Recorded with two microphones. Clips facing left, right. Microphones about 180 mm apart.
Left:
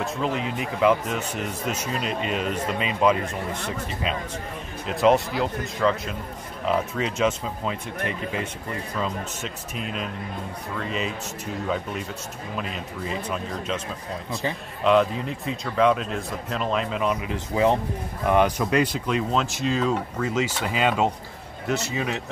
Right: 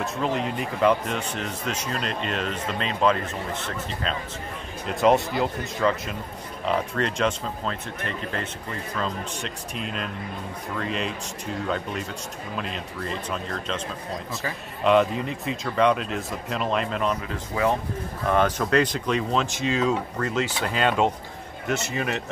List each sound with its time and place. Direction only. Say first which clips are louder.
0.0 s speech: even; centre (ahead or behind)
4.8 s speech: left 1 dB; centre (ahead or behind)
14.8 s speech: even; centre (ahead or behind)
17.3 s speech: left 3 dB; 25° left (ahead or behind)
18.3 s speech: left 1 dB; 10° left (ahead or behind)